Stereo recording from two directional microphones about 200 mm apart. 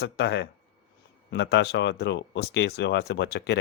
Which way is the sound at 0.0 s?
55° left (ahead or behind).